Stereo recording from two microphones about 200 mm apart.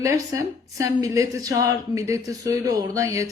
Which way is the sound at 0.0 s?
15° right (ahead or behind).